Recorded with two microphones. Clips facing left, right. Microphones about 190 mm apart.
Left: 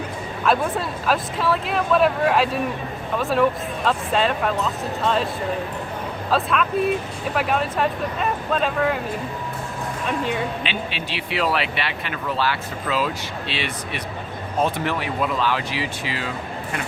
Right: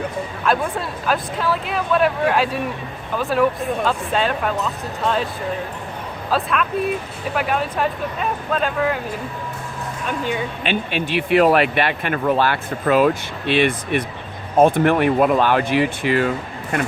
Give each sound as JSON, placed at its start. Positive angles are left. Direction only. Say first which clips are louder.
{"t": 0.4, "sound": "speech", "louder": "left 1 dB", "side_deg": 0}
{"t": 6.3, "sound": "speech", "louder": "even", "side_deg": 0}
{"t": 10.1, "sound": "speech", "louder": "right 1 dB", "side_deg": 0}
{"t": 10.6, "sound": "speech", "louder": "right 6 dB", "side_deg": -50}